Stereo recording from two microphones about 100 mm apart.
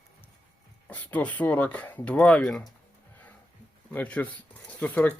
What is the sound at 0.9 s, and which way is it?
Speech, 15° left (ahead or behind).